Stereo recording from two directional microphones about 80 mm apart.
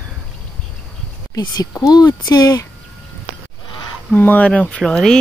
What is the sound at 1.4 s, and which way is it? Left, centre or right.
Speech, left.